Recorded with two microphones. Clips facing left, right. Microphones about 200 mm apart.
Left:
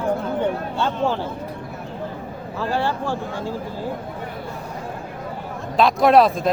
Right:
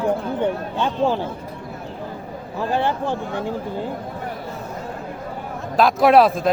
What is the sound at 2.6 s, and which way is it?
Speech, 20° right (ahead or behind).